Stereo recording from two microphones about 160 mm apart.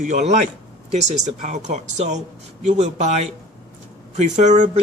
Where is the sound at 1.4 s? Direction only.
45° right (ahead or behind).